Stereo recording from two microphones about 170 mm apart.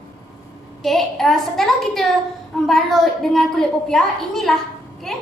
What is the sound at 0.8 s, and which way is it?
A woman's voice, centre (ahead or behind).